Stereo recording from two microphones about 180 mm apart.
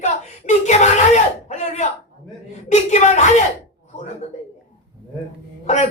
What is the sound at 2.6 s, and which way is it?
Speech, 40° left (ahead or behind).